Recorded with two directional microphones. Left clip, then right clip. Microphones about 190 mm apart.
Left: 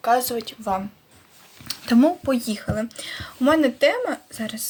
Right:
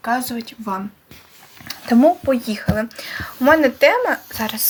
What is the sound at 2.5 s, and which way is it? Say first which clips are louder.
Speech: right 5 dB; 20° left (ahead or behind).